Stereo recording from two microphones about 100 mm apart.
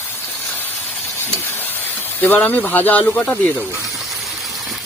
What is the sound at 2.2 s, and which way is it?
Speech, 15° left (ahead or behind).